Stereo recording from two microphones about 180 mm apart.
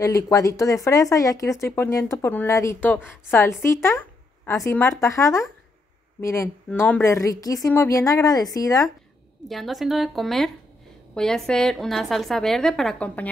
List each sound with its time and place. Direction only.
0.0 s speech: 20° left (ahead or behind)
9.5 s a woman's voice: centre (ahead or behind)